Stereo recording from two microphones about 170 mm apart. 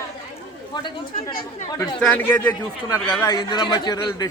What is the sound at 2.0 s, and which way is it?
Speech, 10° left (ahead or behind).